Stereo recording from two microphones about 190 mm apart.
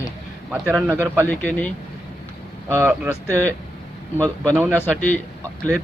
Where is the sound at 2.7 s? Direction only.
10° right (ahead or behind).